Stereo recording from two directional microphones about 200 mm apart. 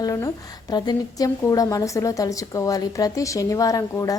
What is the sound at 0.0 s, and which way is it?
A woman's voice, 15° left (ahead or behind).